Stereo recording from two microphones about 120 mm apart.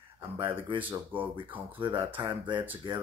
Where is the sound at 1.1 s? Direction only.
45° right (ahead or behind).